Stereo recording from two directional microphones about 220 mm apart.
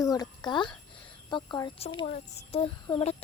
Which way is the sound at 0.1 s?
20° left (ahead or behind).